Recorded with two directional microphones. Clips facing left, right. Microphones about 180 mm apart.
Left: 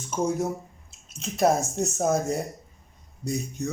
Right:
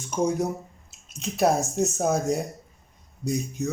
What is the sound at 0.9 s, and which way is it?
Speech, centre (ahead or behind).